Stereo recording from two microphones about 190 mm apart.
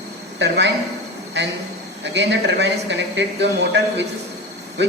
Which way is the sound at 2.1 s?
65° right (ahead or behind).